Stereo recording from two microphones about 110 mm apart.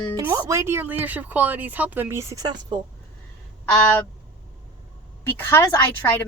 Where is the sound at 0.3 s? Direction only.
30° right (ahead or behind).